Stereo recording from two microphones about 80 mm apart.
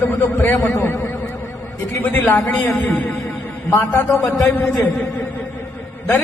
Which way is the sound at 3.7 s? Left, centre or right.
Left.